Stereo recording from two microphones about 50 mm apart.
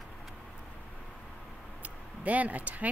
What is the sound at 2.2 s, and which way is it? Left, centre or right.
Speech, right.